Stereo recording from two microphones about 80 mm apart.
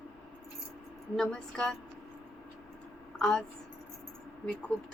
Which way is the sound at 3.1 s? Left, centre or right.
Centre.